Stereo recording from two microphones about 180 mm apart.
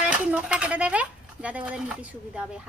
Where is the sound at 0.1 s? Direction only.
5° right (ahead or behind).